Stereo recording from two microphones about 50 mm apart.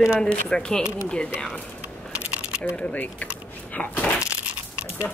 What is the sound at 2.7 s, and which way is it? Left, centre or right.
Speech, left.